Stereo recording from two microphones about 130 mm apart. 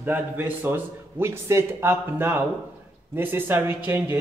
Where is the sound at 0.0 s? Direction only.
15° right (ahead or behind).